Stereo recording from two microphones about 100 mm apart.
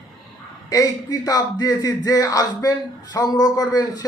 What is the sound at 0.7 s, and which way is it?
A man's voice, 35° left (ahead or behind).